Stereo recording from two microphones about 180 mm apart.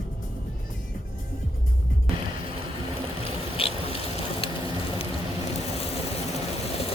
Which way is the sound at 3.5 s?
30° left (ahead or behind).